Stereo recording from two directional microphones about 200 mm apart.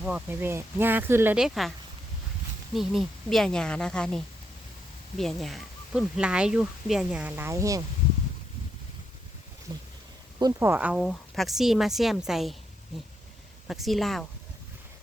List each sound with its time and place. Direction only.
0.0 s speech: 5° right (ahead or behind)
2.7 s speech: centre (ahead or behind)
9.7 s speech: 20° right (ahead or behind); by 12.5 s centre (ahead or behind)
13.7 s speech: centre (ahead or behind)